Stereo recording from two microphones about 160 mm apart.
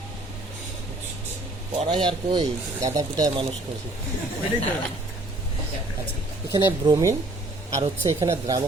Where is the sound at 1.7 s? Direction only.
30° right (ahead or behind).